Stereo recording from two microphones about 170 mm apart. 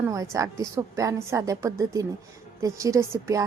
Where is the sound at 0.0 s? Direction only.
20° right (ahead or behind).